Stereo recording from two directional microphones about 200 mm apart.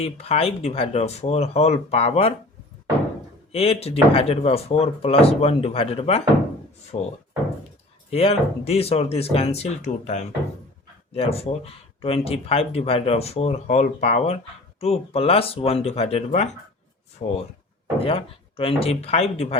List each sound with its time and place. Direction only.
0.0 s speech: 30° left (ahead or behind)
3.5 s speech: 30° left (ahead or behind)
8.1 s speech: 30° left (ahead or behind)
11.1 s speech: 30° left (ahead or behind)